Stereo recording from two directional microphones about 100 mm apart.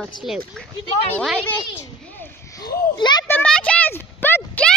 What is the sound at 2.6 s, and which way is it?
Speech, 45° left (ahead or behind).